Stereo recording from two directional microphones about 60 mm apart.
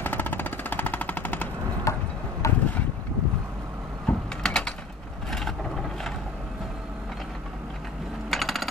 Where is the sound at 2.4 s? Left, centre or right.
Left.